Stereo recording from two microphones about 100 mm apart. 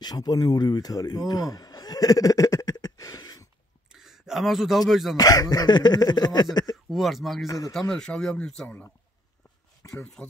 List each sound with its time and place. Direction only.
0.0 s a man's voice: 40° left (ahead or behind)
3.9 s speech: 5° right (ahead or behind)
5.1 s speech: 40° left (ahead or behind)
6.9 s speech: centre (ahead or behind)
7.4 s speech: 35° left (ahead or behind)
7.9 s speech: 5° left (ahead or behind)
9.8 s speech: 30° left (ahead or behind)